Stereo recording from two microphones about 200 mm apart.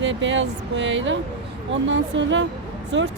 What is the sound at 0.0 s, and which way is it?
Speech, 65° right (ahead or behind).